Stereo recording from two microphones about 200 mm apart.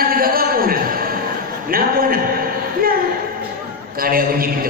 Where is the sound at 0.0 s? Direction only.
45° right (ahead or behind).